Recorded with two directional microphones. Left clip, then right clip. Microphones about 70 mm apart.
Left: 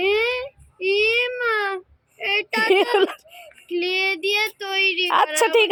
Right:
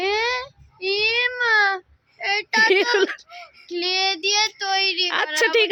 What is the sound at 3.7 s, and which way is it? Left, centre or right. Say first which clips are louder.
Child singing: even; right.